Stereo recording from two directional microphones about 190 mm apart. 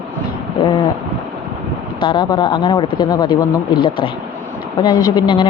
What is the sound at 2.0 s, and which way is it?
Speech, 25° left (ahead or behind).